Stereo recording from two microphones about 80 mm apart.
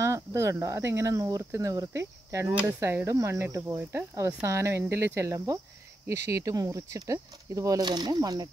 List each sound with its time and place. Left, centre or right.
0.0 s speech: right
3.1 s speech: right
4.1 s speech: right
4.5 s speech: right